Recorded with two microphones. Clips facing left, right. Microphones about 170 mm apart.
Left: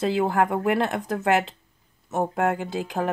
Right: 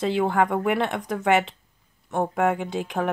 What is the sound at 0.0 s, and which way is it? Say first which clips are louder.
Speech: even; 5° left (ahead or behind).